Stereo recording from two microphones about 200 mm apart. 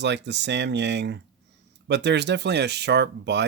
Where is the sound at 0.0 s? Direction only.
60° right (ahead or behind).